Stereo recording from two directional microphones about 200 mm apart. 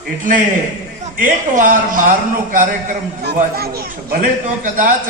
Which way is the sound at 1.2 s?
40° right (ahead or behind).